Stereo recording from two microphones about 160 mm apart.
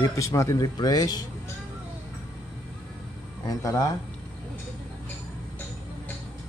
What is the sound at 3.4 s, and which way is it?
Speech, 20° left (ahead or behind).